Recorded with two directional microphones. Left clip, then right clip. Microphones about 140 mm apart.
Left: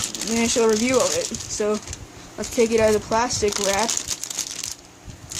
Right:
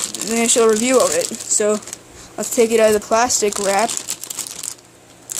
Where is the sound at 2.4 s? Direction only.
70° right (ahead or behind).